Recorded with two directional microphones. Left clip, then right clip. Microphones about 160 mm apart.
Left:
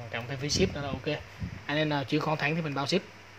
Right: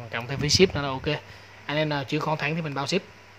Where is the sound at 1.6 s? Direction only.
10° right (ahead or behind).